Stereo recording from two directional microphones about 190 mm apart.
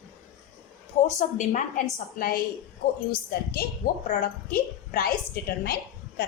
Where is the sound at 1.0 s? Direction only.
40° left (ahead or behind).